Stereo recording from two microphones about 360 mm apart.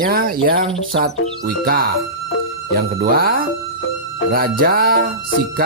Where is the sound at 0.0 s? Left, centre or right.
Right.